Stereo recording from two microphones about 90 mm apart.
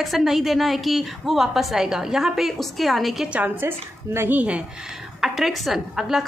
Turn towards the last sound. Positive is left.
turn(degrees=-5)  # may be behind; listen again after turning